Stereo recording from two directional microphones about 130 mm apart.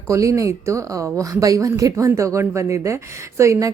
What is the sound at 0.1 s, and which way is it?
A woman's voice, 25° right (ahead or behind).